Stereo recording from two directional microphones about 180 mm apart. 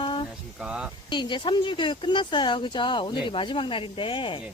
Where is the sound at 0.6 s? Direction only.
5° right (ahead or behind).